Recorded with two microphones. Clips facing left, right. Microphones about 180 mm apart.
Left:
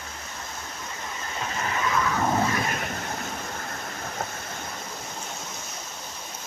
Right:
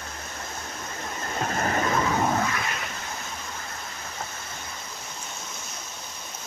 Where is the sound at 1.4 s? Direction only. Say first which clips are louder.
Right 4 dB; 50° right (ahead or behind).